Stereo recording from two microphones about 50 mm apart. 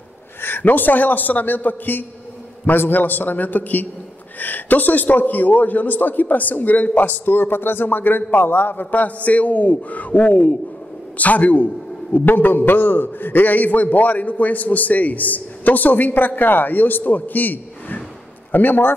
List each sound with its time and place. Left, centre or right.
0.4 s a man's voice: left